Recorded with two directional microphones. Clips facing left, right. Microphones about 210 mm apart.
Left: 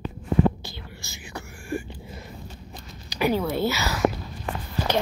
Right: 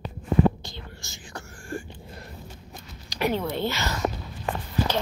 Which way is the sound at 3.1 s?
5° left (ahead or behind).